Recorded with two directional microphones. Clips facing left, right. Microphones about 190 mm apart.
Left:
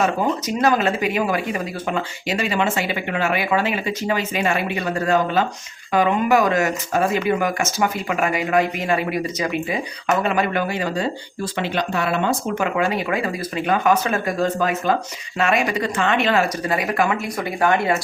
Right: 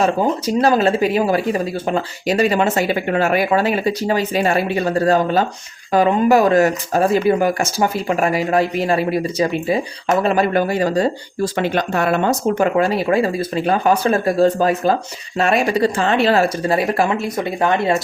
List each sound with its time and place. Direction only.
0.0 s speech: 30° right (ahead or behind)